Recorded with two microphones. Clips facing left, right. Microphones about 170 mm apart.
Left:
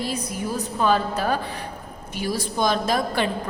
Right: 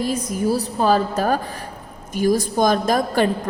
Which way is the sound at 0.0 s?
45° right (ahead or behind).